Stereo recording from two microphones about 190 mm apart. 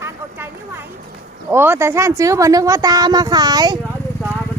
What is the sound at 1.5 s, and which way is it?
Speech, 10° right (ahead or behind).